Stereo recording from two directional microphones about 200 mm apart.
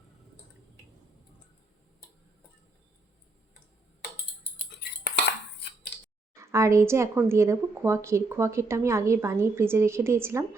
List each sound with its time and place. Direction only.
4.8 s cutlery: 55° left (ahead or behind)
6.3 s a woman's voice: 15° right (ahead or behind)